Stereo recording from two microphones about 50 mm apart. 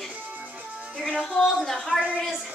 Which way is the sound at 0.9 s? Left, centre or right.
Centre.